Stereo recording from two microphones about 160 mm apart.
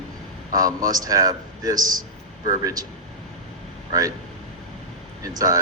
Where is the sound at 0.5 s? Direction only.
20° right (ahead or behind).